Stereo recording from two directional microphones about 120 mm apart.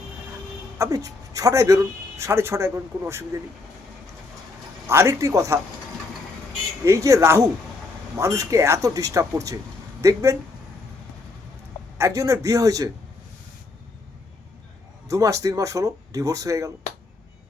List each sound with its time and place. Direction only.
0.8 s speech: 30° right (ahead or behind)
4.9 s speech: 25° right (ahead or behind)
6.8 s speech: 25° right (ahead or behind)
11.9 s speech: 25° right (ahead or behind)
15.0 s speech: 25° right (ahead or behind)